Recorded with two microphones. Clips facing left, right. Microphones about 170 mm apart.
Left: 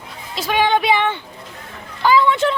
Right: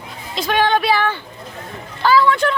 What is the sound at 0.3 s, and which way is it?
Speech, 10° left (ahead or behind).